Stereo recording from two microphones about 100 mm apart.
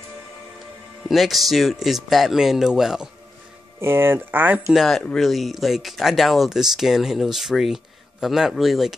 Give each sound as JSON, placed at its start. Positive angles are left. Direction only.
{"t": 1.0, "sound": "speech", "side_deg": 0}
{"t": 3.8, "sound": "speech", "side_deg": -25}
{"t": 4.6, "sound": "speech", "side_deg": 0}